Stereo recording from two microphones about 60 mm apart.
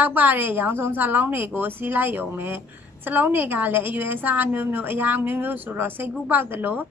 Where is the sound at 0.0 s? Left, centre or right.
Right.